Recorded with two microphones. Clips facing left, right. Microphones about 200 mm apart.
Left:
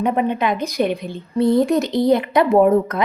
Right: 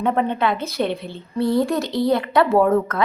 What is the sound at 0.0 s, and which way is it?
A woman's voice, 15° left (ahead or behind).